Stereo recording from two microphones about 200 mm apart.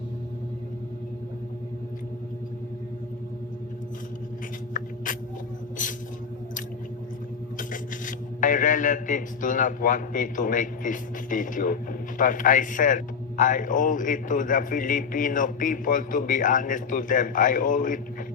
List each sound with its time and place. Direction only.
7.7 s filing: 40° left (ahead or behind)